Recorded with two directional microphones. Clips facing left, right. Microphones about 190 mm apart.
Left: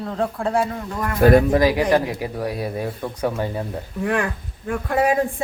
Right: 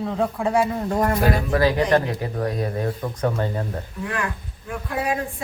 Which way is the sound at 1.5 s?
15° left (ahead or behind).